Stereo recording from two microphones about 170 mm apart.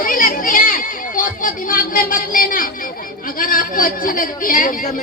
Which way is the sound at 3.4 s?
55° left (ahead or behind).